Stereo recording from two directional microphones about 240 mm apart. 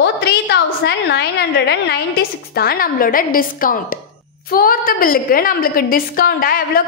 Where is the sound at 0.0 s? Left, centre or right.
Left.